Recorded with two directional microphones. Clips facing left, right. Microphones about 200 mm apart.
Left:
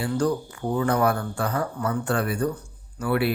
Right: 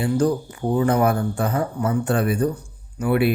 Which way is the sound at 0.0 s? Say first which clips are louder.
Right 4 dB; 20° right (ahead or behind).